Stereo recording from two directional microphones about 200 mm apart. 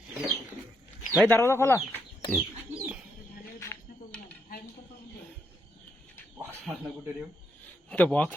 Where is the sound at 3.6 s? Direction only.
10° left (ahead or behind).